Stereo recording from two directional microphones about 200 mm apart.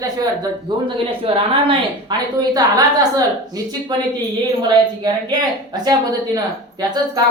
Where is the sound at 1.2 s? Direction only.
25° right (ahead or behind).